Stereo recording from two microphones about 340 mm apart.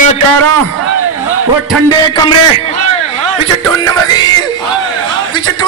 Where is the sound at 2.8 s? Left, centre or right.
Right.